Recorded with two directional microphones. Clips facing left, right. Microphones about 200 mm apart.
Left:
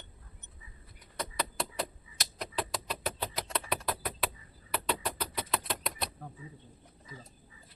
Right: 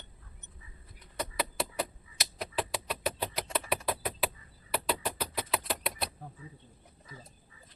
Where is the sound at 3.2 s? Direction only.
10° right (ahead or behind).